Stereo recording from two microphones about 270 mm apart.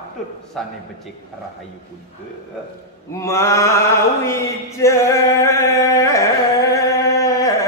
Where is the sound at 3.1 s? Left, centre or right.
Centre.